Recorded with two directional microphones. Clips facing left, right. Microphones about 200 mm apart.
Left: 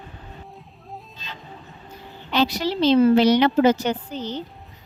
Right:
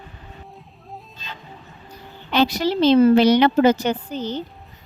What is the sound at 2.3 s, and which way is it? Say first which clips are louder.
A woman's voice: right 3 dB; 55° right (ahead or behind).